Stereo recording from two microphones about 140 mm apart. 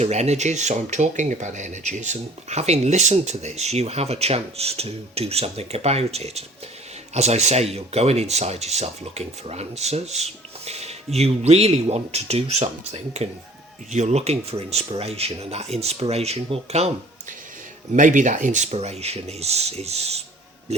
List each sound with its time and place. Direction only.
0.0 s speech: 50° right (ahead or behind)
17.9 s speech: 65° right (ahead or behind); by 20.8 s 50° right (ahead or behind)